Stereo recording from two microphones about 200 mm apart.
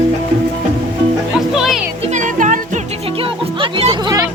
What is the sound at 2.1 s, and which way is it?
Music, 40° right (ahead or behind).